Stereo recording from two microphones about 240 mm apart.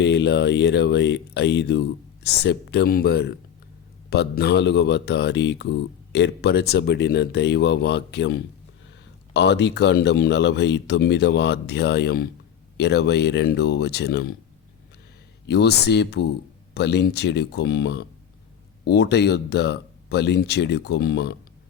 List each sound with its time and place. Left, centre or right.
0.0 s speech: left
15.4 s speech: left